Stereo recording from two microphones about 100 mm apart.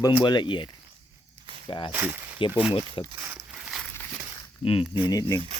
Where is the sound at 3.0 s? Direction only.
50° left (ahead or behind).